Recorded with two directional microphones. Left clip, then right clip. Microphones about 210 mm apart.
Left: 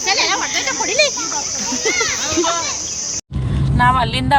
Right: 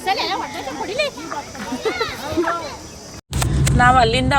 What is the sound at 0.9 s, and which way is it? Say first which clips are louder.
Speech: left 6 dB; 40° left (ahead or behind).